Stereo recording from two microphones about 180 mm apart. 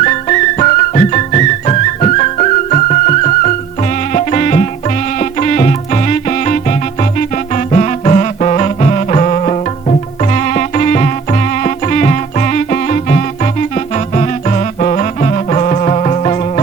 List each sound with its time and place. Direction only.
0.0 s music: 40° left (ahead or behind)